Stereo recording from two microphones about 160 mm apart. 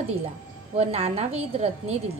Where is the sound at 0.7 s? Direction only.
40° right (ahead or behind).